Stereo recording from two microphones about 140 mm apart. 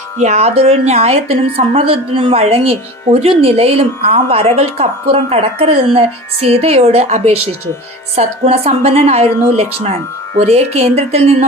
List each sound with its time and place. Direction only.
0.2 s a woman's voice: 50° right (ahead or behind)